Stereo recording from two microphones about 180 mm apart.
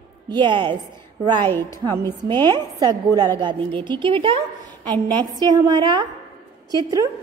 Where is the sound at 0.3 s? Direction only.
25° right (ahead or behind).